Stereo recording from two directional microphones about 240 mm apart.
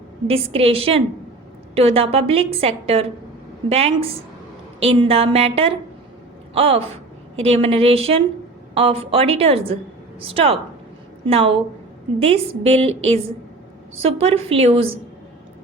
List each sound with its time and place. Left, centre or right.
0.3 s a woman's voice: right